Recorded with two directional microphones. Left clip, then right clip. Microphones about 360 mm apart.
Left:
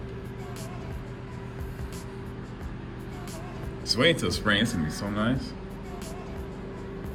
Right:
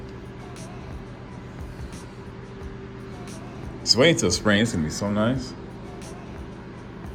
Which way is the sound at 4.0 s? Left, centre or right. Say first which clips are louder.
Right 3 dB; centre.